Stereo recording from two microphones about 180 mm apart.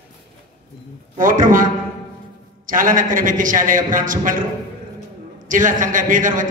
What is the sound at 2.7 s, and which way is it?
A man's voice, 50° right (ahead or behind).